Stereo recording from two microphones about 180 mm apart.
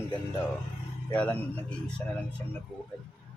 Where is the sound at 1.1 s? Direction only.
5° left (ahead or behind).